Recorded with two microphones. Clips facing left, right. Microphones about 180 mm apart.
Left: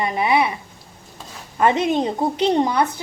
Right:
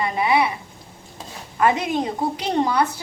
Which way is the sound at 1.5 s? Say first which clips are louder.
Left 2 dB; 25° left (ahead or behind).